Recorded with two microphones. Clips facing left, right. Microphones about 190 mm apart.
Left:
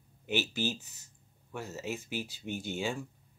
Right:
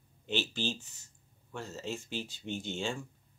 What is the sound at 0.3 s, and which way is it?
Speech, 15° left (ahead or behind).